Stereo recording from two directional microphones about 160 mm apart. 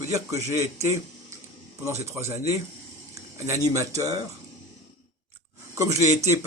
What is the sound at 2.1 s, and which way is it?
A man's voice, 15° right (ahead or behind).